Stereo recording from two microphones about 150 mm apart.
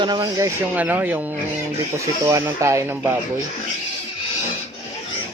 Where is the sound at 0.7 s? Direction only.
10° right (ahead or behind).